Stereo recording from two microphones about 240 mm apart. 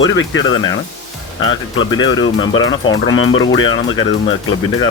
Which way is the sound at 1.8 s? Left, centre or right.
Centre.